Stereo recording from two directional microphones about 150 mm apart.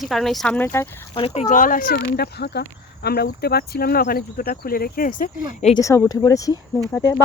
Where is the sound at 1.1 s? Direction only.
40° left (ahead or behind); by 2.1 s 80° left.